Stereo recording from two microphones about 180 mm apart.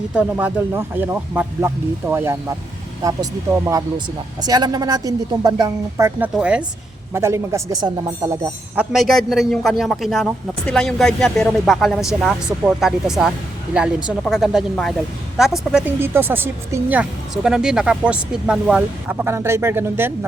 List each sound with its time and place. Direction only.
0.1 s speech: 5° right (ahead or behind)
8.7 s a man's voice: 5° right (ahead or behind)
16.0 s speech: 10° right (ahead or behind)